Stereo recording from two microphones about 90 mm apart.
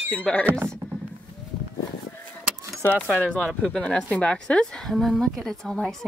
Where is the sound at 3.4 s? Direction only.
5° left (ahead or behind).